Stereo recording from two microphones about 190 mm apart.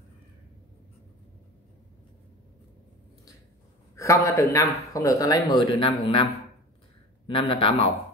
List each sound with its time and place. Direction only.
3.9 s speech: 15° left (ahead or behind)
7.2 s speech: 25° left (ahead or behind)